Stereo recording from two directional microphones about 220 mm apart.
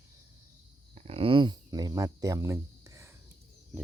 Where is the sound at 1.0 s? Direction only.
25° right (ahead or behind).